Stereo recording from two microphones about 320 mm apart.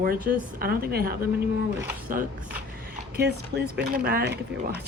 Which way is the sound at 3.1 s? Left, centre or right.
Right.